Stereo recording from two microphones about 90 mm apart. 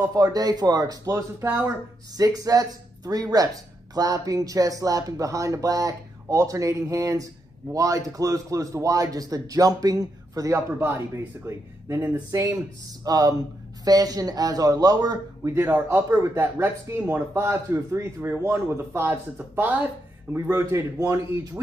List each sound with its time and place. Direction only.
0.1 s a man's voice: 45° right (ahead or behind)
1.4 s speech: 25° right (ahead or behind)
2.1 s a man's voice: 45° right (ahead or behind)
13.0 s a man's voice: 45° right (ahead or behind)
15.5 s speech: 25° right (ahead or behind)
20.4 s a man's voice: 35° right (ahead or behind)